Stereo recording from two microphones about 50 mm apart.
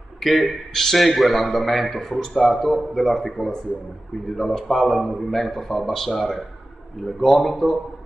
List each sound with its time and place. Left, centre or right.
0.2 s a man's voice: centre